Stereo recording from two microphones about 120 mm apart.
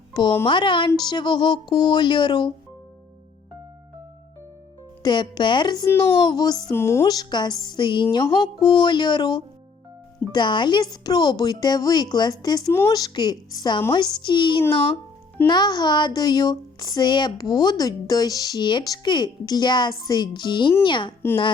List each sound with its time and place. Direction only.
0.1 s speech: 40° left (ahead or behind)
5.0 s speech: 40° left (ahead or behind)
6.7 s a woman's voice: 20° left (ahead or behind)
7.1 s speech: 35° left (ahead or behind)